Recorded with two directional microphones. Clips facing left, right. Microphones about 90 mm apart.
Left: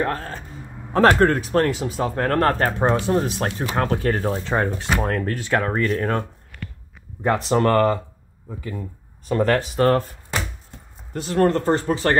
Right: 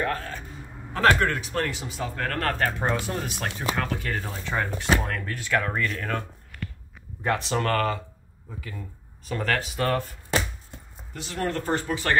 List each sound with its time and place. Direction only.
0.0 s speech: 35° left (ahead or behind)
7.6 s speech: 30° left (ahead or behind)
11.1 s speech: 40° left (ahead or behind)